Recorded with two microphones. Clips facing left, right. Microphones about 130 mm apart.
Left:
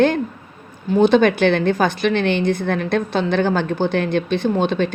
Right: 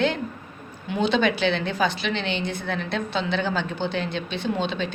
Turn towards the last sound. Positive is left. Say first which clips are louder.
# left 8 dB
turn(degrees=50)  # may be behind; listen again after turning